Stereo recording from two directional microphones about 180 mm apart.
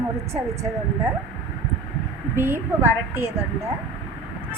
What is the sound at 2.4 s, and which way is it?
A woman's voice, 15° right (ahead or behind).